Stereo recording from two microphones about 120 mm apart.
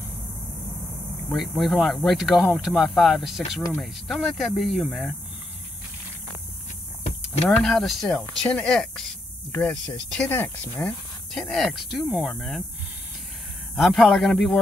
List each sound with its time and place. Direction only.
1.3 s speech: centre (ahead or behind)
7.4 s speech: centre (ahead or behind); by 10.7 s 15° left (ahead or behind)
10.8 s speech: 5° left (ahead or behind)
13.7 s speech: centre (ahead or behind)